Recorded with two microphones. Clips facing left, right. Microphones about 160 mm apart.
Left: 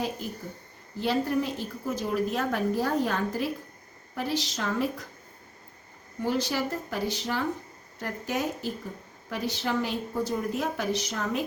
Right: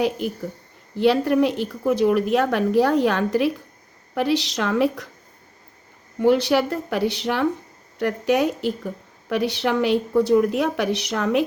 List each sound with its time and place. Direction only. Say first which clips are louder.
0.2 s a woman's voice: right 9 dB; 70° right (ahead or behind)
6.2 s a woman's voice: right 10 dB; 70° right (ahead or behind)